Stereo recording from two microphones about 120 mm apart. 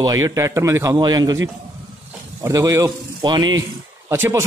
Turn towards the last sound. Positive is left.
turn(degrees=-20)  # may be behind; listen again after turning